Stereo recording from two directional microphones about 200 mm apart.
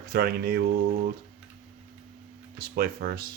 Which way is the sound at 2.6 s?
50° right (ahead or behind).